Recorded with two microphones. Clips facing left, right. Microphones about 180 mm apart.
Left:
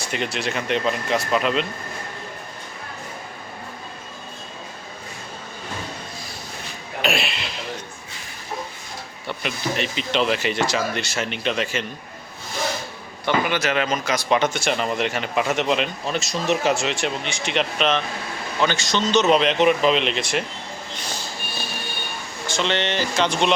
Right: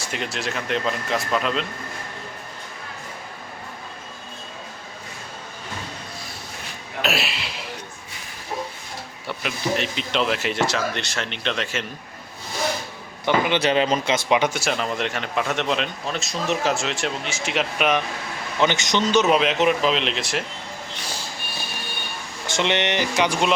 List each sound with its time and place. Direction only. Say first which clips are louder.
0.0 s speech: left 2 dB; centre (ahead or behind)
7.0 s a sound: left 1 dB; 5° right (ahead or behind)
9.2 s speech: even; centre (ahead or behind)
13.2 s speech: right 1 dB; 20° right (ahead or behind)
13.6 s speech: right 3 dB; 30° right (ahead or behind)
14.3 s speech: left 2 dB; 10° right (ahead or behind)
18.6 s speech: right 1 dB; 20° right (ahead or behind); by 20.4 s centre (ahead or behind)
22.4 s speech: right 1 dB; 20° right (ahead or behind)